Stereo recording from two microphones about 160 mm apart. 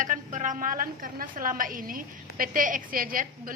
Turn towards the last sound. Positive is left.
turn(degrees=-60)  # may be behind; listen again after turning